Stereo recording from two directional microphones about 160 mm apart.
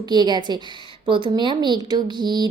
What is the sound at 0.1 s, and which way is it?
Speech, 25° right (ahead or behind).